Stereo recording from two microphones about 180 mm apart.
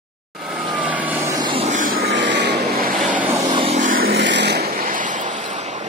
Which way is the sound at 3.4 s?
25° right (ahead or behind).